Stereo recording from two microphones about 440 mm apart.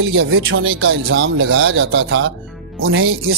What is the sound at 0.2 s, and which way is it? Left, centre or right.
A man's voice, right.